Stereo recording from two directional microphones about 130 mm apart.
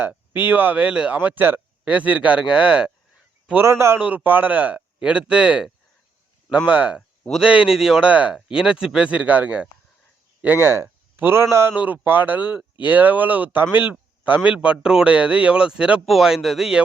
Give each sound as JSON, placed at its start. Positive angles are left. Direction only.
{"t": 0.0, "sound": "speech", "side_deg": -15}